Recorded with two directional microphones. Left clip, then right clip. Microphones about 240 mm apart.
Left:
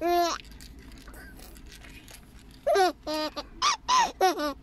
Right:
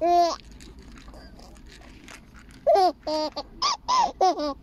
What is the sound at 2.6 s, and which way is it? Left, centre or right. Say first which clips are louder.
Baby laughter: right 4 dB; centre.